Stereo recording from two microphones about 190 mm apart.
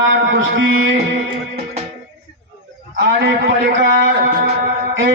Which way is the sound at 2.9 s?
65° right (ahead or behind).